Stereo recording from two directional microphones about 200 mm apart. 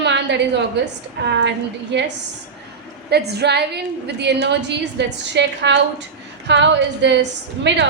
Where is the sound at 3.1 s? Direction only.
55° right (ahead or behind).